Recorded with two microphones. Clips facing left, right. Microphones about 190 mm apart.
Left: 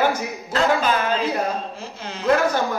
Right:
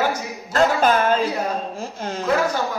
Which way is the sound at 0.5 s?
50° right (ahead or behind).